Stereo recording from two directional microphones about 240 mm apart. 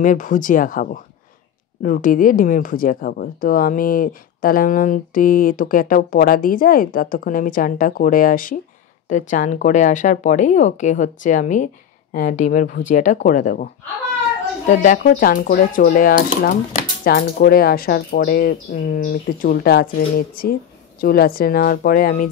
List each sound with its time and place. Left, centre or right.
0.0 s speech: left
14.7 s speech: left